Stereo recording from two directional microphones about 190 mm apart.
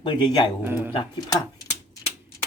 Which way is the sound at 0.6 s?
10° right (ahead or behind).